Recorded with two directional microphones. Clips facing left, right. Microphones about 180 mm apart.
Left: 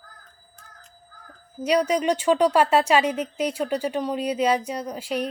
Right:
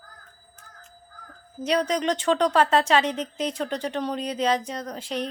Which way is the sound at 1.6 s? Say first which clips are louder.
Left 3 dB; 10° left (ahead or behind).